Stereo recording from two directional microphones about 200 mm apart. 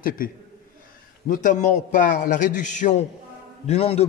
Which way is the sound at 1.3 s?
40° left (ahead or behind).